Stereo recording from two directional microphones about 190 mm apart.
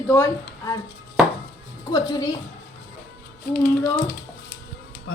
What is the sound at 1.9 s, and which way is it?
Speech, 20° left (ahead or behind).